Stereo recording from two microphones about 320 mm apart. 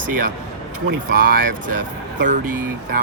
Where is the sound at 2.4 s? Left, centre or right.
Right.